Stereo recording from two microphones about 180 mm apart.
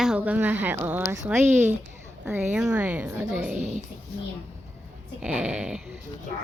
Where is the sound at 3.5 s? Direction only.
45° right (ahead or behind).